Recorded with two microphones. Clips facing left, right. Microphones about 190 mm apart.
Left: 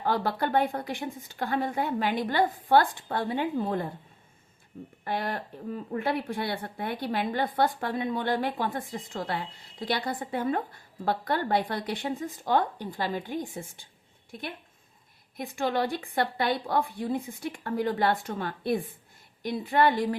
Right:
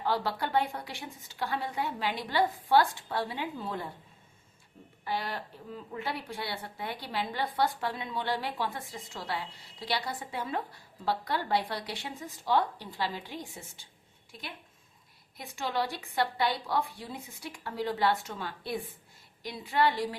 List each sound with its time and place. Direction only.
0.0 s a woman's voice: 50° left (ahead or behind)
5.0 s a woman's voice: 50° left (ahead or behind)